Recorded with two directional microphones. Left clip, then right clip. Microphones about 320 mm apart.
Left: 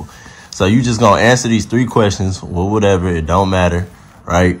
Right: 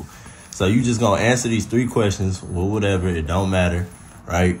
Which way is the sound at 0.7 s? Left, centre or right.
Left.